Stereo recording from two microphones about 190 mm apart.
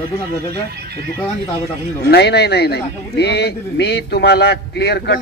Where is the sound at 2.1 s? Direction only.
60° left (ahead or behind).